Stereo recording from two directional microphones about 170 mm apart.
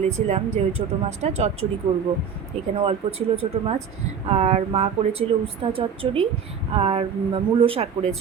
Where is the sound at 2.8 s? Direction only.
35° right (ahead or behind).